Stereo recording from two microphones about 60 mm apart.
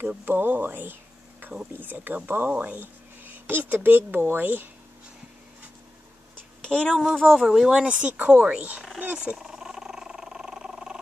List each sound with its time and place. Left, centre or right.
0.2 s speech: right
1.4 s a sound: right
1.7 s speech: right
6.6 s speech: centre
7.1 s speech: centre
7.5 s a woman's voice: centre
9.4 s dog: centre